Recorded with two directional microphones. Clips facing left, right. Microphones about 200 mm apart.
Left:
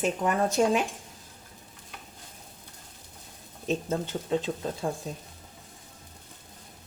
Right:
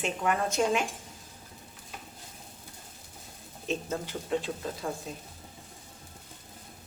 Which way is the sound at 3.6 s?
25° left (ahead or behind).